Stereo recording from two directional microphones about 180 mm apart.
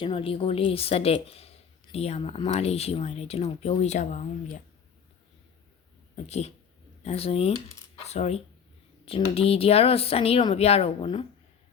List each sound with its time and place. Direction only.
0.0 s speech: 30° left (ahead or behind)
6.1 s speech: 35° left (ahead or behind)